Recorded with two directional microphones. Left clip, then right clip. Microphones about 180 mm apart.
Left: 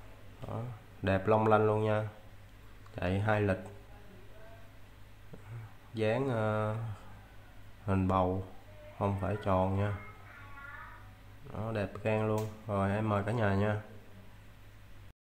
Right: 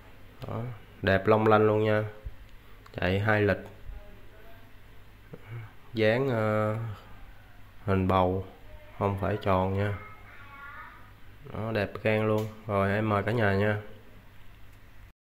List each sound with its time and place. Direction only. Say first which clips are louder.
0.5 s speech: right 4 dB; 20° right (ahead or behind)
5.9 s speech: right 6 dB; 20° right (ahead or behind)
7.8 s speech: right 5 dB; 20° right (ahead or behind)
11.5 s speech: right 6 dB; 20° right (ahead or behind)